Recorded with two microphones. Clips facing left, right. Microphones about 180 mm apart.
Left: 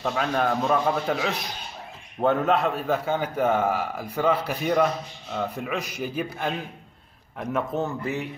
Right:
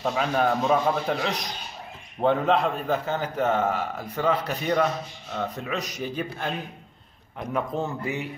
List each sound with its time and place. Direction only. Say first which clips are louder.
0.0 s a man's voice: right 1 dB; 5° right (ahead or behind)